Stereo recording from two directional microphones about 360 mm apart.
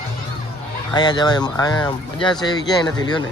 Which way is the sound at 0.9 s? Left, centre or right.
Centre.